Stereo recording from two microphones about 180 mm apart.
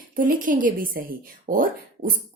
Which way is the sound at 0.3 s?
50° right (ahead or behind).